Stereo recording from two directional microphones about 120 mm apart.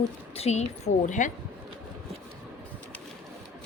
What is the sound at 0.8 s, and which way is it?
Speech, 90° left.